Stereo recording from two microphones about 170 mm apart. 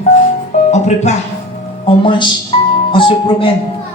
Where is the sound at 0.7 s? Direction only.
40° left (ahead or behind).